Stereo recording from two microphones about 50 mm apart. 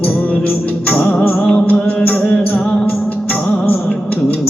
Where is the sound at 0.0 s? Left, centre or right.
Left.